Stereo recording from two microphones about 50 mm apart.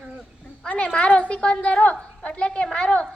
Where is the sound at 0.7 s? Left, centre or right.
Left.